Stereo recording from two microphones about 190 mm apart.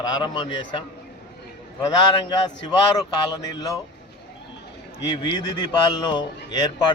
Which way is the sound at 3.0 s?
20° left (ahead or behind).